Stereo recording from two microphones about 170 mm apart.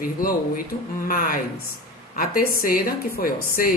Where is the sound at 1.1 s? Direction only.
55° left (ahead or behind).